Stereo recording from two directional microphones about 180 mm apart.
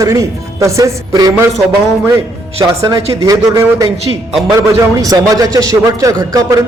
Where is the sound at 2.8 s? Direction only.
20° right (ahead or behind).